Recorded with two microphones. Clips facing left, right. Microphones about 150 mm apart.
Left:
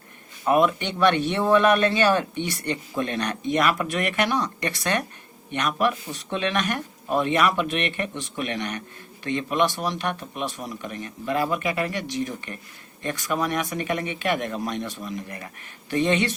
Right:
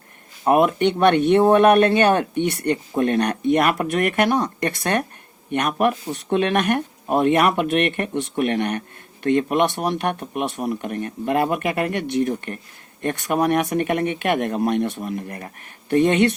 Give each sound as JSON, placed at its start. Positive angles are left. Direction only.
{"t": 0.4, "sound": "speech", "side_deg": -55}